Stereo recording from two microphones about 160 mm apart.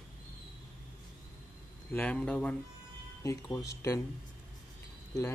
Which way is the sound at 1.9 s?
10° left (ahead or behind).